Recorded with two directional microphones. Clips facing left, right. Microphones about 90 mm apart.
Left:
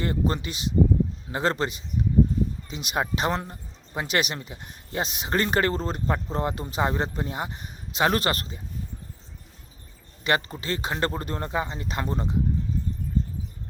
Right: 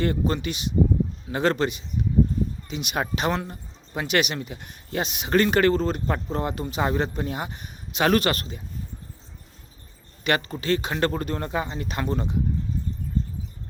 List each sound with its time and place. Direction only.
0.0 s speech: 30° left (ahead or behind)
10.2 s speech: 30° left (ahead or behind)